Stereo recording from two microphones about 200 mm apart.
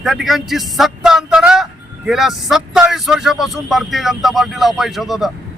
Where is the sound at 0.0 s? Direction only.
Centre (ahead or behind).